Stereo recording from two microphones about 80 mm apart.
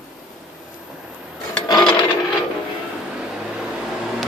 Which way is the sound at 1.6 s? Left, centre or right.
Left.